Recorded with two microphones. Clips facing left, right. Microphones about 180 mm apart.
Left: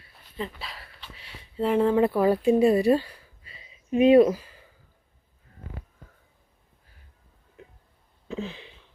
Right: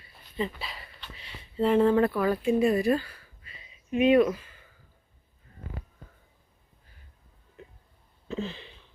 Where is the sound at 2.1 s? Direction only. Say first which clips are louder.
Left 4 dB; 30° left (ahead or behind).